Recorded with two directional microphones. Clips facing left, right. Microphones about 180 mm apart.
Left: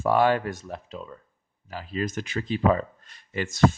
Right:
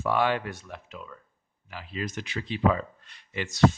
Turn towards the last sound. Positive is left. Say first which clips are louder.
# left 3 dB
turn(degrees=45)  # may be behind; listen again after turning